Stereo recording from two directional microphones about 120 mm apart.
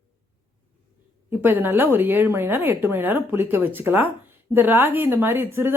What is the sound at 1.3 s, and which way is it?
A woman's voice, 15° right (ahead or behind).